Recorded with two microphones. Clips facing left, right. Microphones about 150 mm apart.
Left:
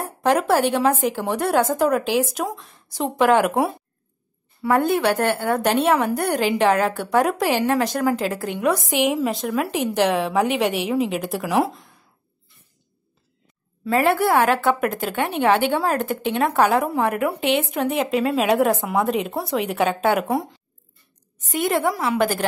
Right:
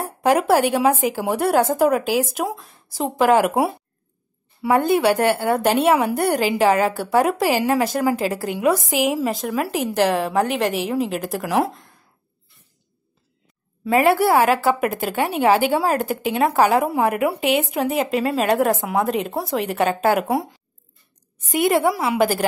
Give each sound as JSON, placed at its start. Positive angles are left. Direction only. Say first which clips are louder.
{"t": 0.0, "sound": "a woman's voice", "louder": "right 2 dB", "side_deg": -10}
{"t": 4.7, "sound": "a woman's voice", "louder": "right 2 dB", "side_deg": -5}
{"t": 14.0, "sound": "a woman's voice", "louder": "right 2 dB", "side_deg": -5}
{"t": 21.5, "sound": "a woman's voice", "louder": "right 3 dB", "side_deg": -10}